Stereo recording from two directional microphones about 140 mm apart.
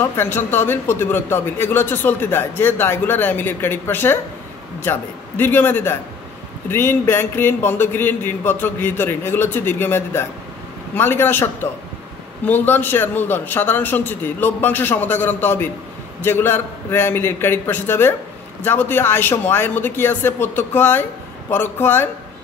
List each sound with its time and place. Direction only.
0.0 s speech: 15° left (ahead or behind)